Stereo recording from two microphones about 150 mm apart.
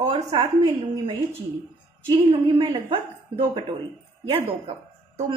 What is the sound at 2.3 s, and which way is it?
Speech, 35° right (ahead or behind).